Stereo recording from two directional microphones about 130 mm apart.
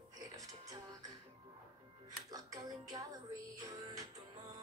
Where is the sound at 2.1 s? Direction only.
30° right (ahead or behind).